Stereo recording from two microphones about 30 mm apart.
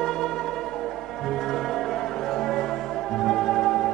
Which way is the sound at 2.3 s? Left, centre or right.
Centre.